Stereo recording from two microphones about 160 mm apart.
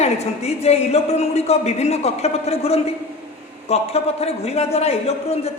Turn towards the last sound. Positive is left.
turn(degrees=40)  # may be behind; listen again after turning